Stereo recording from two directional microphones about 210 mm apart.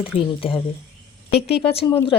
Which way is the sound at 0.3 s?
25° left (ahead or behind).